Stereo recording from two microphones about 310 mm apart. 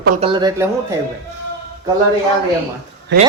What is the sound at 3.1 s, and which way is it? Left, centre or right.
Speech, right.